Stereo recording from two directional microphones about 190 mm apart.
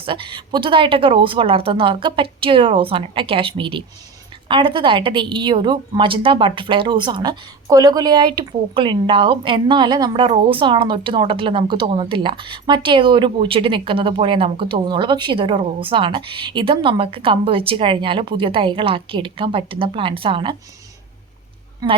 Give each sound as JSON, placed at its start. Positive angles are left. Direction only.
{"t": 0.0, "sound": "a woman's voice", "side_deg": -25}
{"t": 21.8, "sound": "a woman's voice", "side_deg": -20}